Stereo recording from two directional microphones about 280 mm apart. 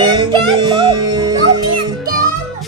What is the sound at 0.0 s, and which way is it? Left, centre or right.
Music, centre.